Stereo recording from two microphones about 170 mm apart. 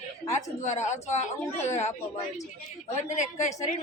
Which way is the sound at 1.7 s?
40° left (ahead or behind).